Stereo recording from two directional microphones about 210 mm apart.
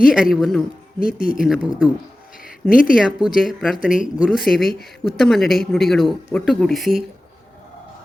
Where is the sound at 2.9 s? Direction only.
5° right (ahead or behind).